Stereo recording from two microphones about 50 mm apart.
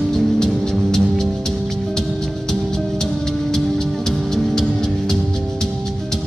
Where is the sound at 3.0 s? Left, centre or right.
Centre.